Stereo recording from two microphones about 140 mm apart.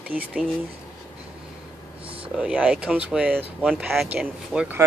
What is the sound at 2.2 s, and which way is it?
Speech, 10° right (ahead or behind).